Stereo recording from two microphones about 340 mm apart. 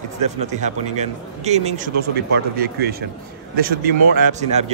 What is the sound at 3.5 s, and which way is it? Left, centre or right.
Speech, right.